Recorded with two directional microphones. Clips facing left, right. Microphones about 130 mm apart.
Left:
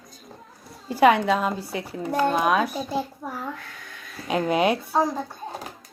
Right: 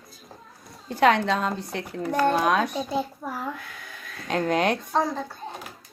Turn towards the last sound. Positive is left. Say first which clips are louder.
# left 2 dB
turn(degrees=10)  # may be behind; listen again after turning